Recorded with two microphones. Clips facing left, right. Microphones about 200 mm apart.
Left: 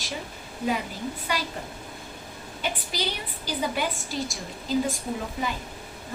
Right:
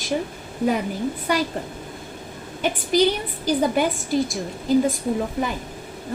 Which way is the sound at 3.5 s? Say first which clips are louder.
Right 8 dB; 50° right (ahead or behind).